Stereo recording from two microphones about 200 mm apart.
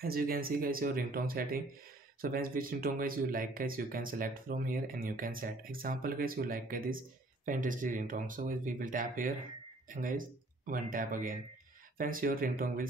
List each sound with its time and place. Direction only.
0.0 s speech: 50° right (ahead or behind)